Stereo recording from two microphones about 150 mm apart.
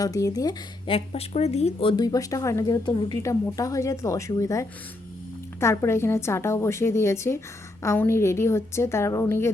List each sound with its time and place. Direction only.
0.0 s speech: 25° left (ahead or behind)
0.9 s speech: 40° left (ahead or behind)
3.2 s a woman's voice: 20° left (ahead or behind)